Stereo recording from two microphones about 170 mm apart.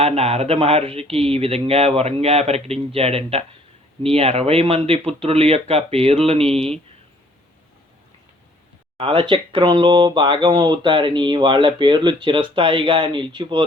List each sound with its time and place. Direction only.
0.0 s speech: 40° right (ahead or behind)
9.0 s speech: 30° right (ahead or behind)